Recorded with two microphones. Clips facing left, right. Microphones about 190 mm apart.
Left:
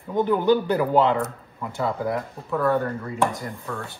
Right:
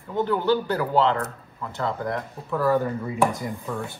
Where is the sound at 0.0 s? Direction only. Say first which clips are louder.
Left 3 dB; 15° left (ahead or behind); by 3.3 s 5° right (ahead or behind).